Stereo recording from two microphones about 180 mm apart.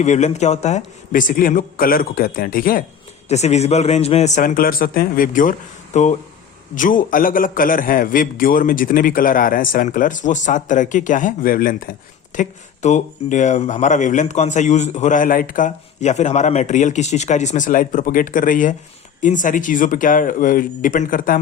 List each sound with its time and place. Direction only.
0.0 s a man's voice: 40° left (ahead or behind)
3.2 s a man's voice: 40° left (ahead or behind)